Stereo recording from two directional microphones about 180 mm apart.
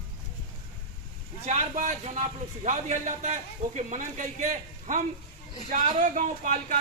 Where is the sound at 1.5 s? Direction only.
40° right (ahead or behind).